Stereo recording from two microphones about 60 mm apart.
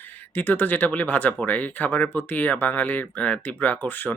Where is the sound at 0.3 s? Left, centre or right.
Left.